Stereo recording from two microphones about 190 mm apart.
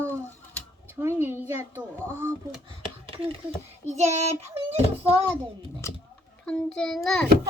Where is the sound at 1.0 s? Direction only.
10° right (ahead or behind).